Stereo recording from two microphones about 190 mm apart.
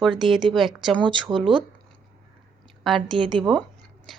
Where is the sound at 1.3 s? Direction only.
15° right (ahead or behind).